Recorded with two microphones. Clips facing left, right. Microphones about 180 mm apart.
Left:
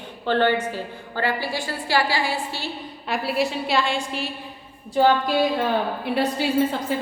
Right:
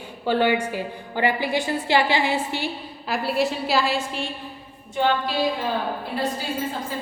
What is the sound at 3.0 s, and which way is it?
A woman's voice, centre (ahead or behind).